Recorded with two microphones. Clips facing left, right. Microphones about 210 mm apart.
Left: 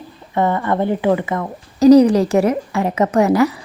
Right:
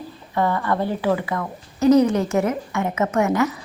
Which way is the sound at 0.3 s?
20° left (ahead or behind).